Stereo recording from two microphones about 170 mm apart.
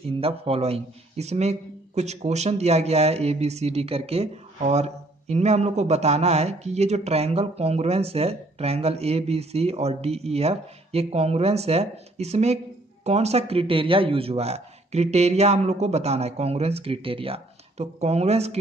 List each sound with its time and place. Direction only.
0.0 s speech: 35° right (ahead or behind)